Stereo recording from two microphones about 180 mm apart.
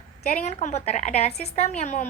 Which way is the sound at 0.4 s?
40° left (ahead or behind).